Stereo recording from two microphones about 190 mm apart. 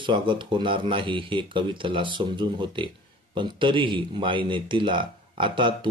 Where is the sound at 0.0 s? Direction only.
25° right (ahead or behind).